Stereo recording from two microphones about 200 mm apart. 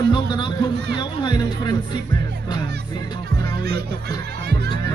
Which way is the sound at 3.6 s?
55° right (ahead or behind).